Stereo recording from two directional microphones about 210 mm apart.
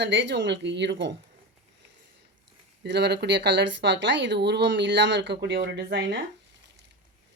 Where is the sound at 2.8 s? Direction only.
55° right (ahead or behind).